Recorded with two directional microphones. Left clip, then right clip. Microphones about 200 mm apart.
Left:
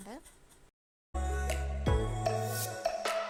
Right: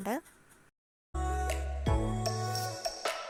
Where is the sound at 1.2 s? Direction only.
Centre (ahead or behind).